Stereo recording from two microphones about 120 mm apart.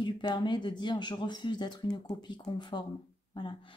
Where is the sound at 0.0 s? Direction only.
40° left (ahead or behind).